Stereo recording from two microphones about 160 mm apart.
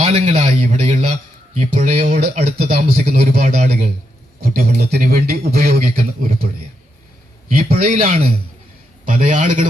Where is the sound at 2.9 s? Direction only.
70° right (ahead or behind).